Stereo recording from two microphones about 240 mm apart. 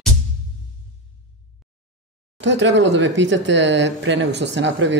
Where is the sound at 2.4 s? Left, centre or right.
Right.